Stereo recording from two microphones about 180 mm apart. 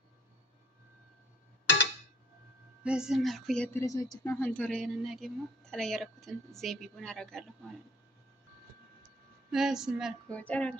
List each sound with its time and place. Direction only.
2.8 s a woman's voice: 5° right (ahead or behind)
3.7 s a woman's voice: 15° left (ahead or behind)
9.5 s a woman's voice: 5° right (ahead or behind)
10.2 s child singing: 5° left (ahead or behind)